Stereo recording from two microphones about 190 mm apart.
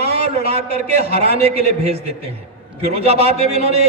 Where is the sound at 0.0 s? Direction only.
30° right (ahead or behind).